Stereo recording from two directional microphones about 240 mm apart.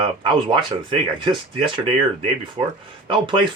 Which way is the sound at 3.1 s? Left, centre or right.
Right.